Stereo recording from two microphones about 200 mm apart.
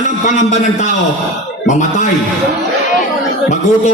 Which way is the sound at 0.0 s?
40° left (ahead or behind).